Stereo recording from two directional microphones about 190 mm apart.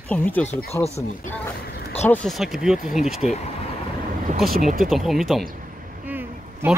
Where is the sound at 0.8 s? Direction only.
35° left (ahead or behind).